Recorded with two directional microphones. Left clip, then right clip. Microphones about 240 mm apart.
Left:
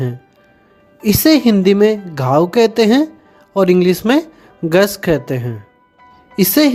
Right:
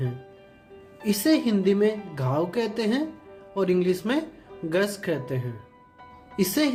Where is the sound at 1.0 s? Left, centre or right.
Left.